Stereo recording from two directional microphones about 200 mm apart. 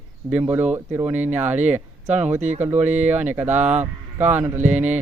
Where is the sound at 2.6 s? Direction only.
10° right (ahead or behind).